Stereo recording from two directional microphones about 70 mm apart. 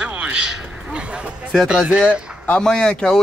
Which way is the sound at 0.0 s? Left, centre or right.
Centre.